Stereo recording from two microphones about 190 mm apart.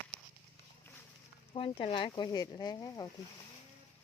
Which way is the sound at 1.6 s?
30° left (ahead or behind).